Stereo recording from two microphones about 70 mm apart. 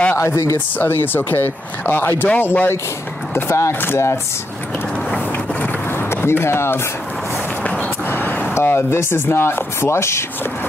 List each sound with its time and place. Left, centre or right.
0.1 s speech: left
0.7 s speech: left
3.3 s speech: left
5.9 s a sound: left
8.1 s a sound: left
8.5 s speech: left